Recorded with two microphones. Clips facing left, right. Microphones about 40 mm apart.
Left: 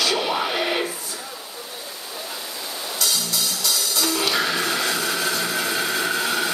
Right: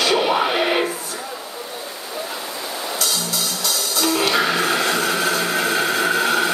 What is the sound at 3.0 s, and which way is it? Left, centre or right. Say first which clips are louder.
Music: even; centre.